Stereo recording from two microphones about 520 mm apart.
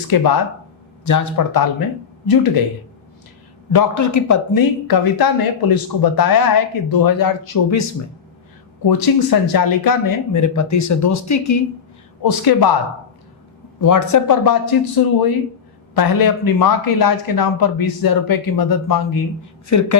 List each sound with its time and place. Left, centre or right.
0.1 s speech: left
3.7 s speech: left
12.2 s speech: left
13.8 s speech: left